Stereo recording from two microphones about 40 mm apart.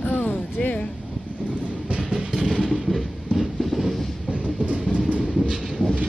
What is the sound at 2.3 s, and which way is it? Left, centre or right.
Vehicle, centre.